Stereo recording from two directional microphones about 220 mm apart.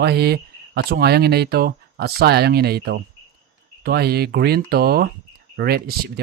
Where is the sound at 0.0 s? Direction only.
45° right (ahead or behind).